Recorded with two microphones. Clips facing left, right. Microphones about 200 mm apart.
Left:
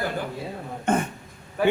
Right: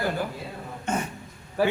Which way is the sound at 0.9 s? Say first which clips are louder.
Left 5 dB; 55° left (ahead or behind).